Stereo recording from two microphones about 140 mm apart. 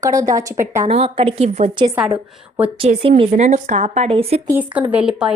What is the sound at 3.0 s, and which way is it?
Speech, 45° right (ahead or behind).